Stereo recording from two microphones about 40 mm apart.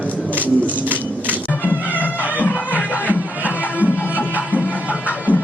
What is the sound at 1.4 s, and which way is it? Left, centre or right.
Music, left.